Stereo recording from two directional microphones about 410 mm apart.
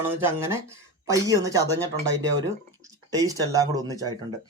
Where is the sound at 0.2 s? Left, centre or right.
Centre.